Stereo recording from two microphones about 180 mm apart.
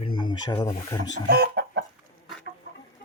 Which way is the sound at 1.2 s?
60° right (ahead or behind).